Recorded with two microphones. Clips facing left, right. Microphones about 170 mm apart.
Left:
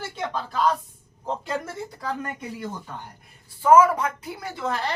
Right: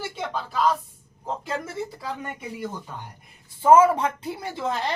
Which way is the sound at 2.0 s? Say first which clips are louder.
Left 2 dB; 10° right (ahead or behind).